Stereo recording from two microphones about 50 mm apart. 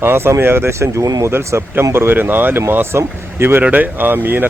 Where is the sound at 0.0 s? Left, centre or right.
Right.